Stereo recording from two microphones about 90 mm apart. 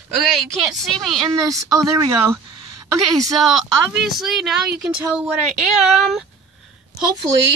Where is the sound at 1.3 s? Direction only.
40° right (ahead or behind).